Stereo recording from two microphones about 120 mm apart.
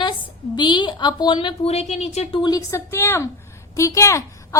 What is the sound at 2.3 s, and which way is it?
A woman's voice, 35° left (ahead or behind).